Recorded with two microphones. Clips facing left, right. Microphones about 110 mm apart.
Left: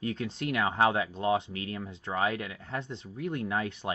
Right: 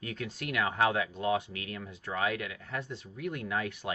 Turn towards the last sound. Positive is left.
turn(degrees=30)  # may be behind; listen again after turning